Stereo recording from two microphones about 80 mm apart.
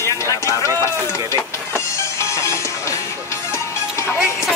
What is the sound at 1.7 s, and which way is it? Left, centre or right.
Music, left.